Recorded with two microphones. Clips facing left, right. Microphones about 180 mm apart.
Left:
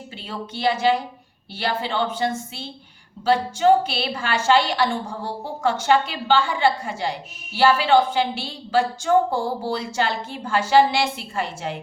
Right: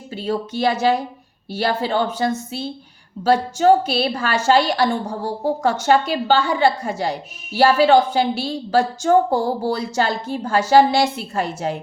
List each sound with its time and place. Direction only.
0.2 s a woman's voice: 45° right (ahead or behind)